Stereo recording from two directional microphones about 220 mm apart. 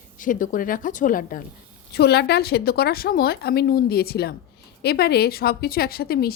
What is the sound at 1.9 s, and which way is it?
A woman's voice, 50° left (ahead or behind).